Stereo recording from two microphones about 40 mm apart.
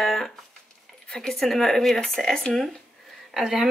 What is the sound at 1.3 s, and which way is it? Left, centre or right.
Speech, centre.